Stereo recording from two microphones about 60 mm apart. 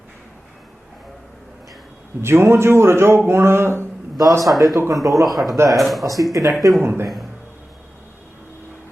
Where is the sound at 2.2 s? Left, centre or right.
Right.